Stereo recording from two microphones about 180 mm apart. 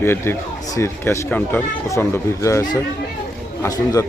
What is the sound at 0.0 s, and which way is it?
A man's voice, 15° left (ahead or behind).